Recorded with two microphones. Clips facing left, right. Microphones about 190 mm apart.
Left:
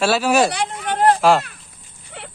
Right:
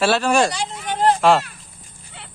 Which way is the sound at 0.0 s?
5° left (ahead or behind).